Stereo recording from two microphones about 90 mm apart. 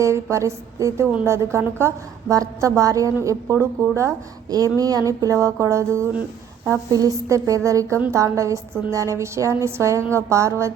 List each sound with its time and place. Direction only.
0.0 s a woman's voice: 35° right (ahead or behind)